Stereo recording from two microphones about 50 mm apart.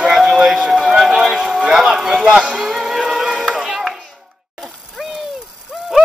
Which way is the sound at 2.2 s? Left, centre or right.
Centre.